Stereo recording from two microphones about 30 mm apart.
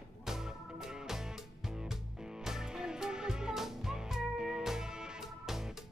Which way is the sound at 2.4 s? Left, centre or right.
Centre.